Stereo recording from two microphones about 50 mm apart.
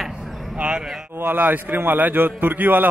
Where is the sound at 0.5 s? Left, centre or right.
Right.